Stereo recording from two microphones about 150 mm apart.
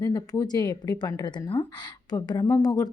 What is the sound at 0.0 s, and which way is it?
Speech, 25° left (ahead or behind).